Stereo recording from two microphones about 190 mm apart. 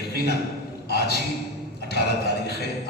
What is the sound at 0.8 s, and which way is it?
Speech, 55° left (ahead or behind).